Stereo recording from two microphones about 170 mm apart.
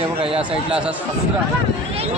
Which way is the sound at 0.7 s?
5° right (ahead or behind).